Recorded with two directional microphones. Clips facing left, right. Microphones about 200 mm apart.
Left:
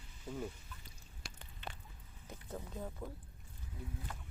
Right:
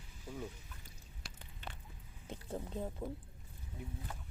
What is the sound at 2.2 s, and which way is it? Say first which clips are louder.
Speech: right 4 dB; 30° right (ahead or behind).